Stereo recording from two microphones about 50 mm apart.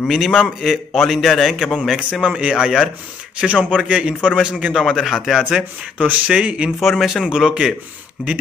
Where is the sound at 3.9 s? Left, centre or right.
Right.